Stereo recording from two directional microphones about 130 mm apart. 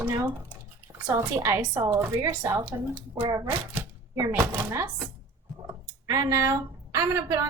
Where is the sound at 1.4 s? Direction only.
15° right (ahead or behind).